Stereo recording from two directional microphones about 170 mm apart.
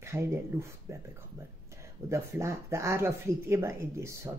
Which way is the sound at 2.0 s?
15° right (ahead or behind).